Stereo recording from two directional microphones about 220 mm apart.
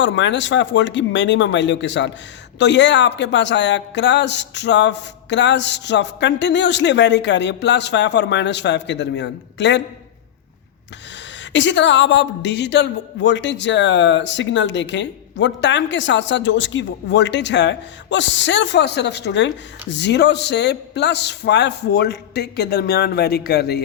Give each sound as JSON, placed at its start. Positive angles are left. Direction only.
{"t": 0.0, "sound": "a woman's voice", "side_deg": 55}
{"t": 11.5, "sound": "a woman's voice", "side_deg": 55}